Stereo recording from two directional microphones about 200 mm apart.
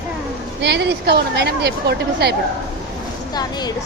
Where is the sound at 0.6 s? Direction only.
60° right (ahead or behind).